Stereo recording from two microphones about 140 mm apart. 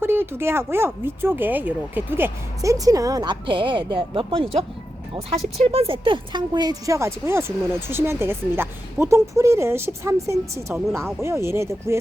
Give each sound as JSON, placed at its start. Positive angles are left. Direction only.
{"t": 0.0, "sound": "speech", "side_deg": -15}